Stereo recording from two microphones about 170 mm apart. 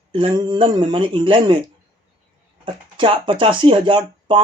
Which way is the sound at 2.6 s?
30° right (ahead or behind).